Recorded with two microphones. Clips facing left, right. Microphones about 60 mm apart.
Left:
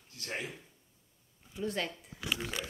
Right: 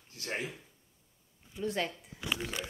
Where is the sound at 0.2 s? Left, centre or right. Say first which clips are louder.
Right 2 dB; right.